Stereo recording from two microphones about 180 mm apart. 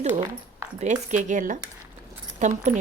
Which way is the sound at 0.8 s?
40° right (ahead or behind).